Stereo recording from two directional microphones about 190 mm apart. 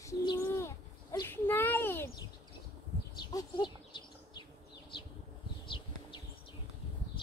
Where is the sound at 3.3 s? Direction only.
25° left (ahead or behind).